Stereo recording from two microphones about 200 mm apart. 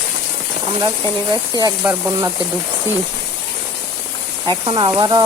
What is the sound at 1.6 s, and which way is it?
Speech, 15° right (ahead or behind).